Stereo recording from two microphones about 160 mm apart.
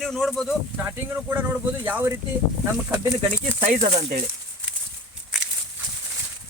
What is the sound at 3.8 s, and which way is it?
Speech, 45° right (ahead or behind).